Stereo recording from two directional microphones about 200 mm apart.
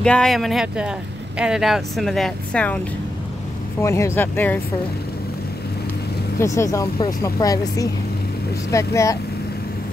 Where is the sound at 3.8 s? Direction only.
15° left (ahead or behind).